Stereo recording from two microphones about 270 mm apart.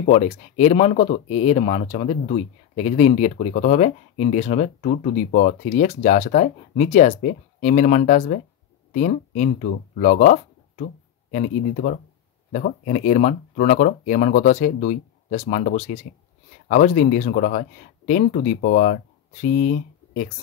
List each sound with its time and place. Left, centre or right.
0.0 s speech: left